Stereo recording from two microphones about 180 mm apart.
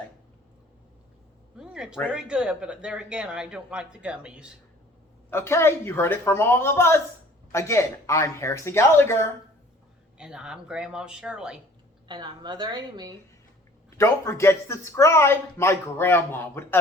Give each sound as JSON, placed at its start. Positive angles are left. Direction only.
{"t": 1.5, "sound": "a sound", "side_deg": -5}
{"t": 2.0, "sound": "speech", "side_deg": -5}
{"t": 5.3, "sound": "speech", "side_deg": 15}
{"t": 10.2, "sound": "speech", "side_deg": -5}
{"t": 12.0, "sound": "a woman's voice", "side_deg": -25}
{"t": 14.0, "sound": "speech", "side_deg": 15}